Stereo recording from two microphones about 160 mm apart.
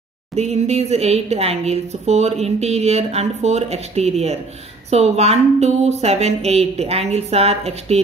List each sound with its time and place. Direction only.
0.4 s a woman's voice: 40° right (ahead or behind)